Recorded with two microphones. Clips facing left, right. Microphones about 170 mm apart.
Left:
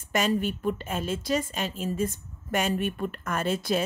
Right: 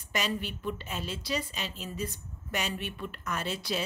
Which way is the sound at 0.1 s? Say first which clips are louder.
Left 7 dB; 50° left (ahead or behind).